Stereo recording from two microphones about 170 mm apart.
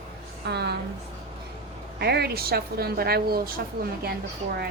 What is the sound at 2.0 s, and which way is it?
A woman's voice, 70° right (ahead or behind).